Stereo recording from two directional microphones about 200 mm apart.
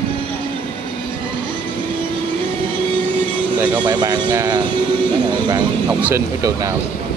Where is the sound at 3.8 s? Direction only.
20° right (ahead or behind).